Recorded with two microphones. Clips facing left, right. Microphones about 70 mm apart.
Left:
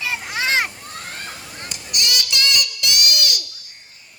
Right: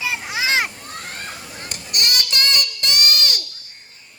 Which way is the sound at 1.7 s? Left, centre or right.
Right.